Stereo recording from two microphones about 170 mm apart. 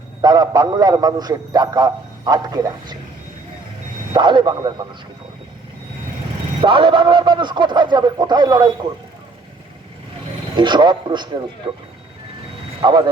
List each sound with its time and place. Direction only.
0.2 s a man's voice: 25° right (ahead or behind)
4.1 s a man's voice: 25° right (ahead or behind)
6.6 s a man's voice: 30° right (ahead or behind)
10.6 s a man's voice: 25° right (ahead or behind)
12.8 s a man's voice: 25° right (ahead or behind)